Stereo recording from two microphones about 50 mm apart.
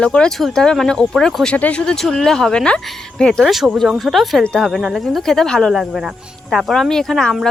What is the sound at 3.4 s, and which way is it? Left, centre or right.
Speech, centre.